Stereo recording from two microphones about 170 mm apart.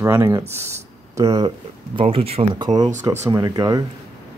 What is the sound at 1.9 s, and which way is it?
Speech, 35° right (ahead or behind).